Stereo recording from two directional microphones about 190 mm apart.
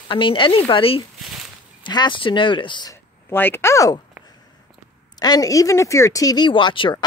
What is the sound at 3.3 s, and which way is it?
Speech, 10° left (ahead or behind).